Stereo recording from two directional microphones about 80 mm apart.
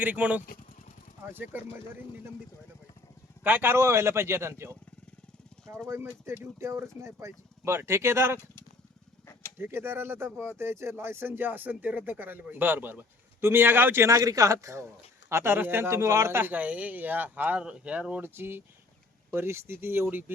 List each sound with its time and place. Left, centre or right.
0.0 s speech: right
3.4 s speech: right
5.9 s speech: right
9.6 s speech: right
18.3 s speech: right